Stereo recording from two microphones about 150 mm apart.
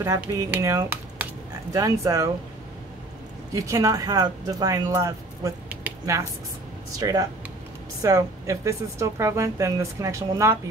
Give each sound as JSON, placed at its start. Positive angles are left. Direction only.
{"t": 0.0, "sound": "a woman's voice", "side_deg": -20}
{"t": 3.5, "sound": "a woman's voice", "side_deg": -20}
{"t": 5.7, "sound": "a sound", "side_deg": -15}
{"t": 7.0, "sound": "a woman's voice", "side_deg": -25}